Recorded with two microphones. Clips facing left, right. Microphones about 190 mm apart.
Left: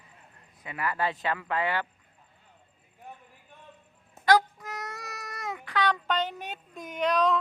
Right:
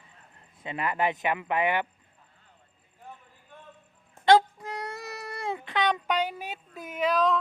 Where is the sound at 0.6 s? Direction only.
25° right (ahead or behind).